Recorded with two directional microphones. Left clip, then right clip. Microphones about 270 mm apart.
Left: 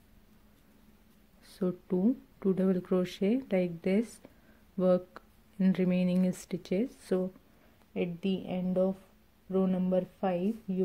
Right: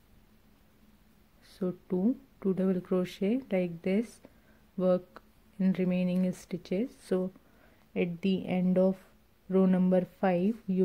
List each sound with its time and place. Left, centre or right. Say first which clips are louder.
1.4 s speech: left 1 dB; centre
7.9 s speech: right 2 dB; centre